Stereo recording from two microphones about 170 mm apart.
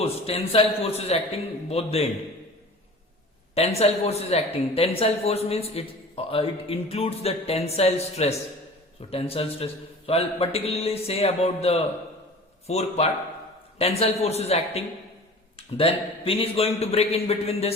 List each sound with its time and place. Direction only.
0.0 s speech: 35° left (ahead or behind)
3.5 s speech: 35° left (ahead or behind)